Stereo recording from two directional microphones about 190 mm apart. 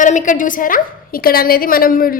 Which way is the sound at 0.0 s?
40° left (ahead or behind).